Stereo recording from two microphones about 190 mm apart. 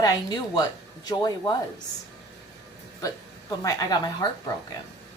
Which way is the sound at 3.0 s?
20° left (ahead or behind).